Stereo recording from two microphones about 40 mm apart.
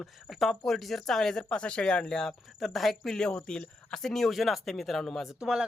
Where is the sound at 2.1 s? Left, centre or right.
Centre.